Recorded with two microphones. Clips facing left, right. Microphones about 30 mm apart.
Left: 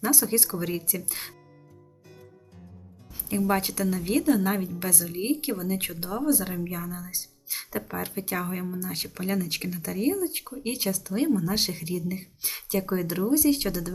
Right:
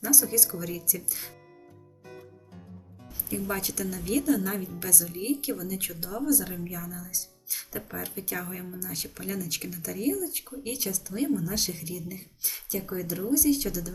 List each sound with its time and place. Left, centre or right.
0.0 s speech: left
3.2 s speech: left